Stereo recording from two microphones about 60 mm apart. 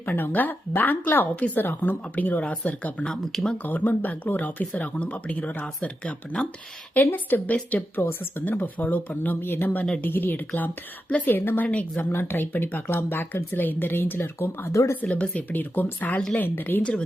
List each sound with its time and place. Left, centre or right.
0.0 s speech: left; by 3.6 s centre
3.6 s speech: left
7.1 s speech: left
12.0 s speech: left
15.0 s speech: centre